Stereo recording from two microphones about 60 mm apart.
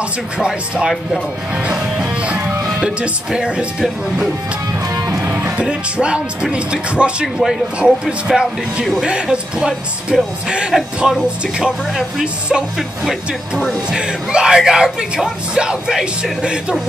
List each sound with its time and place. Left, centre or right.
0.4 s speech: centre
1.7 s music: centre
2.6 s speech: centre
5.2 s music: right
5.6 s speech: centre
13.9 s speech: centre